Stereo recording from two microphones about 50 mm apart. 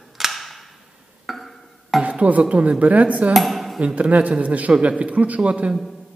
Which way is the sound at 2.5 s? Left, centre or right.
Right.